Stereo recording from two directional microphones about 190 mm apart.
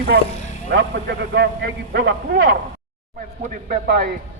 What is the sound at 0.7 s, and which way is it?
A man's voice, 60° right (ahead or behind).